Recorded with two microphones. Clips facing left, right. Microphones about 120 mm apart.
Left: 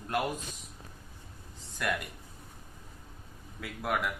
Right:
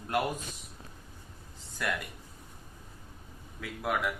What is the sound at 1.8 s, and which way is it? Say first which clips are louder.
Speech: left 1 dB; centre (ahead or behind).